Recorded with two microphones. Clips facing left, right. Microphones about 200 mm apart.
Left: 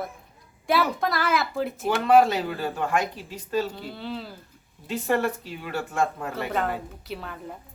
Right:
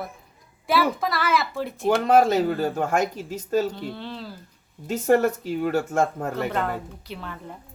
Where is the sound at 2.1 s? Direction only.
45° right (ahead or behind).